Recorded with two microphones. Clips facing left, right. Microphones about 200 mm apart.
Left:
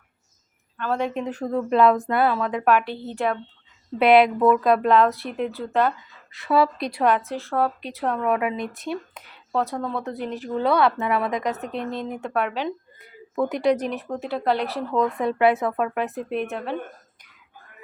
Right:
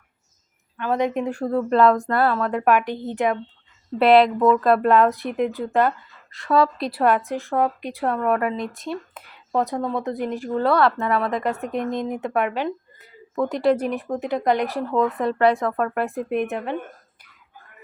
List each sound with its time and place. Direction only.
0.8 s a woman's voice: 15° right (ahead or behind); by 2.6 s centre (ahead or behind)
2.6 s speech: 15° right (ahead or behind)
3.9 s speech: centre (ahead or behind)
6.3 s a woman's voice: 5° left (ahead or behind)
9.5 s speech: 15° right (ahead or behind)
10.6 s a woman's voice: centre (ahead or behind)
13.3 s a woman's voice: 5° left (ahead or behind)
16.0 s speech: 10° right (ahead or behind)